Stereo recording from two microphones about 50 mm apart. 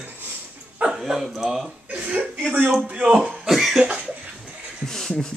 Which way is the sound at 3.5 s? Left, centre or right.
Centre.